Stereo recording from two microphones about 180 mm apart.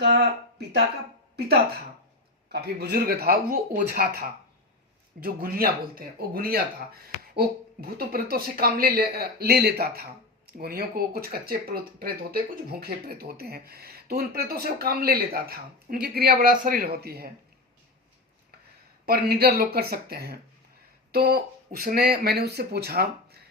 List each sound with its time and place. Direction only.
2.5 s speech: 65° right (ahead or behind)
19.0 s speech: 60° right (ahead or behind)